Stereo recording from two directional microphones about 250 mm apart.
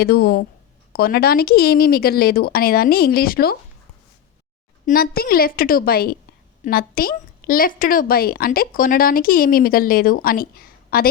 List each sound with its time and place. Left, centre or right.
0.0 s a woman's voice: left
4.9 s a woman's voice: left